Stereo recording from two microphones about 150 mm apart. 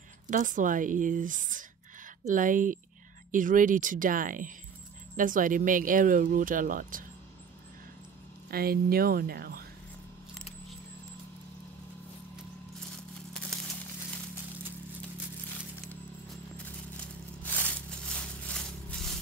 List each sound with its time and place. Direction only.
0.3 s speech: 60° right (ahead or behind)
8.5 s speech: 85° right
16.6 s a sound: 10° left (ahead or behind)